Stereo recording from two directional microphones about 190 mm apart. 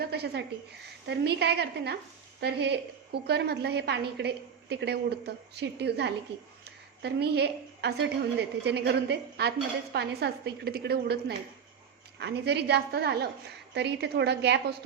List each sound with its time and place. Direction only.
0.1 s a woman's voice: 60° right (ahead or behind)